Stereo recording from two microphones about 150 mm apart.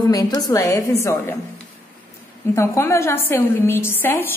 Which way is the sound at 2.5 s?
20° left (ahead or behind).